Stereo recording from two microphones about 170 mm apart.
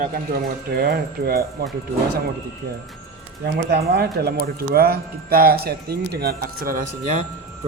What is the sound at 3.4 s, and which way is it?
Speech, 70° right (ahead or behind).